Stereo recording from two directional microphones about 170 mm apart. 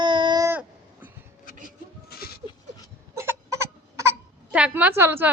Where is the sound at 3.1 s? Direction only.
15° right (ahead or behind).